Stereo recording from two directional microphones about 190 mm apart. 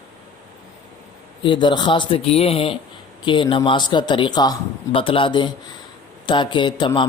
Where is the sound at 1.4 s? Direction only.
25° left (ahead or behind).